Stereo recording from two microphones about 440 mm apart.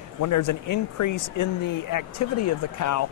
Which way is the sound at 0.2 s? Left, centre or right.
Left.